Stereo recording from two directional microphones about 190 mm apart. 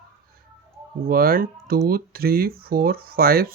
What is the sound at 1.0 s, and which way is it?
Speech, 50° right (ahead or behind).